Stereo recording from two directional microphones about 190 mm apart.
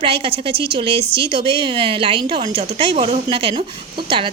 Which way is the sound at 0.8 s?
25° right (ahead or behind).